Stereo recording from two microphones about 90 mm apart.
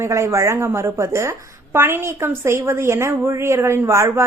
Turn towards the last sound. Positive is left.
turn(degrees=-35)  # may be behind; listen again after turning